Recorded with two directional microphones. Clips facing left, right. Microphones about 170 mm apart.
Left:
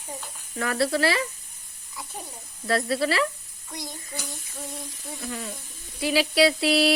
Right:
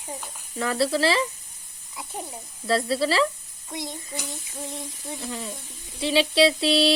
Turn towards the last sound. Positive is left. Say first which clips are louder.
# right 1 dB
turn(degrees=-30)  # may be behind; listen again after turning